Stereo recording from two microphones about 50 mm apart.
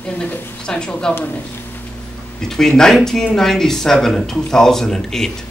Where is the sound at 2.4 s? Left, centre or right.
Centre.